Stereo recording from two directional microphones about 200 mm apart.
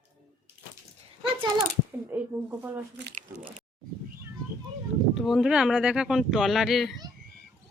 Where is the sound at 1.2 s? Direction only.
25° right (ahead or behind).